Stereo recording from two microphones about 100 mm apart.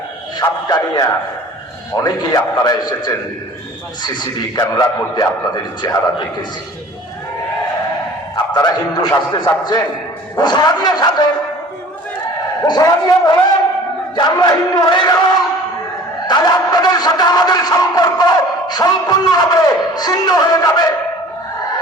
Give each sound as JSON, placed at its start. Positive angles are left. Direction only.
{"t": 0.3, "sound": "speech", "side_deg": 45}
{"t": 2.0, "sound": "a man's voice", "side_deg": 40}
{"t": 8.5, "sound": "speech", "side_deg": 40}
{"t": 12.6, "sound": "speech", "side_deg": 45}
{"t": 16.2, "sound": "speech", "side_deg": 45}